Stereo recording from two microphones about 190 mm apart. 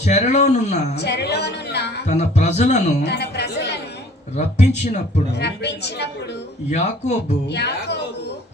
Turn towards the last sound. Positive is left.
turn(degrees=60)  # may be behind; listen again after turning